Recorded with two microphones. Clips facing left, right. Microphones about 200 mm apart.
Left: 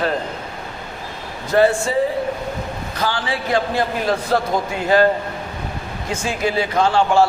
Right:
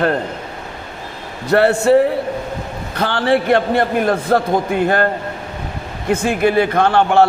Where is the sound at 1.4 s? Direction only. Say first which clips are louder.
Right 3 dB; 65° right (ahead or behind).